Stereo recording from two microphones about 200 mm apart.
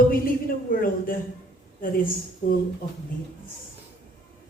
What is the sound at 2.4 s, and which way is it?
Speech, 45° left (ahead or behind).